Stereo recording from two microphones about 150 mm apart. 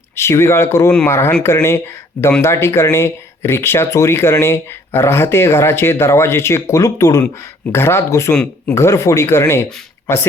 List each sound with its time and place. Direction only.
0.2 s speech: 15° left (ahead or behind)